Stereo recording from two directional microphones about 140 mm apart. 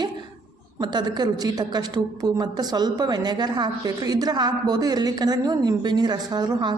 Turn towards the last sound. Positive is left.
turn(degrees=-30)  # may be behind; listen again after turning